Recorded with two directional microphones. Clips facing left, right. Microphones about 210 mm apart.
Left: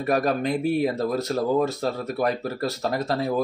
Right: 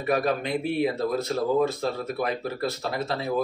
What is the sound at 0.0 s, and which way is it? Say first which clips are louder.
Speech: left 2 dB; 45° left (ahead or behind).